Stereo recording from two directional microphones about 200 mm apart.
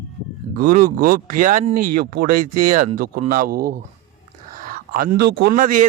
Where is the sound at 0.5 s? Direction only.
45° right (ahead or behind).